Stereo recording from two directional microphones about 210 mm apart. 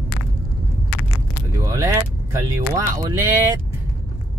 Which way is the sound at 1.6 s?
15° right (ahead or behind).